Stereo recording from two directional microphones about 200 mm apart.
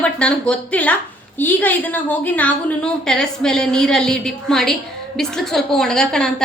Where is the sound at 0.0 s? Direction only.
5° left (ahead or behind).